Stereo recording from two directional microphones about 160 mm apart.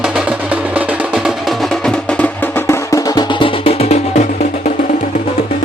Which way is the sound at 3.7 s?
40° left (ahead or behind).